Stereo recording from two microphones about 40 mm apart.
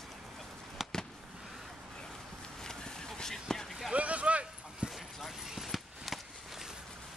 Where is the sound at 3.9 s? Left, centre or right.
Right.